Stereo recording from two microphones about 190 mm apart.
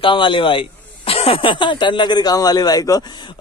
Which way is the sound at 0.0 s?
25° left (ahead or behind).